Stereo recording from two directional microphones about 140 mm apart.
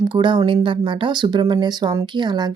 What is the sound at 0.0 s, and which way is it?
Speech, 35° right (ahead or behind).